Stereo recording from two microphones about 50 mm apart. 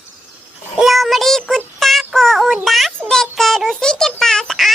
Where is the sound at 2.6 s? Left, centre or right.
Centre.